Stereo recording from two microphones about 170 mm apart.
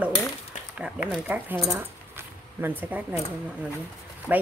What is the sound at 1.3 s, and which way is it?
Speech, 10° right (ahead or behind).